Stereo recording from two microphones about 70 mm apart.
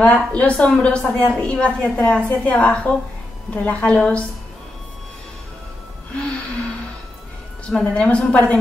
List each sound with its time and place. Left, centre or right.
0.0 s a woman's voice: centre
7.7 s a woman's voice: centre